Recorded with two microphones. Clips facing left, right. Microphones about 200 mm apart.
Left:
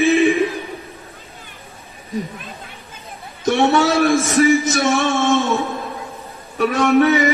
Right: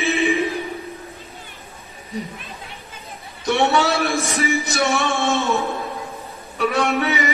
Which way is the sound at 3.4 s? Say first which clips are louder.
Left 3 dB; 40° left (ahead or behind).